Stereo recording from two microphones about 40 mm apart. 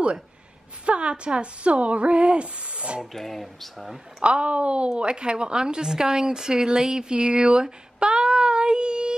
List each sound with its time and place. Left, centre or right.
0.8 s speech: right
3.1 s speech: centre
4.2 s speech: right